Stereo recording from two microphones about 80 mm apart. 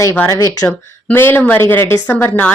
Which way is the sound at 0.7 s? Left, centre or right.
Left.